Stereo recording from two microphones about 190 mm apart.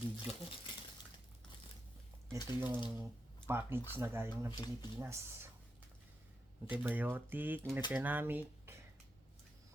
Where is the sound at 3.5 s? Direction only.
10° right (ahead or behind).